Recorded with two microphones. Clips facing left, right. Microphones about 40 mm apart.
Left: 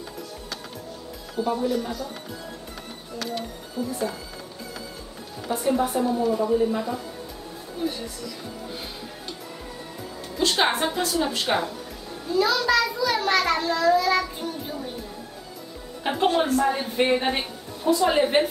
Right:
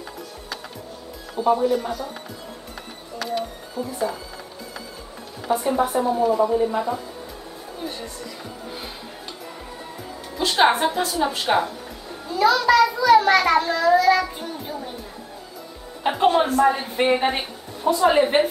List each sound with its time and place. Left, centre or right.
1.3 s speech: centre
3.2 s speech: centre
3.7 s speech: centre
5.5 s speech: centre
10.3 s speech: centre
16.0 s speech: centre